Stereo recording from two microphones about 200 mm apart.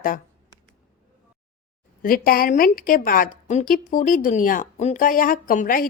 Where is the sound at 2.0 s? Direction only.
45° left (ahead or behind).